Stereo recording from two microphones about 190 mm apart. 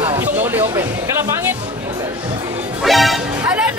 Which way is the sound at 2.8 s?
Centre (ahead or behind).